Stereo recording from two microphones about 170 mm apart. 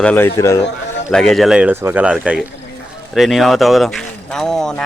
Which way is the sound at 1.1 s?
5° left (ahead or behind).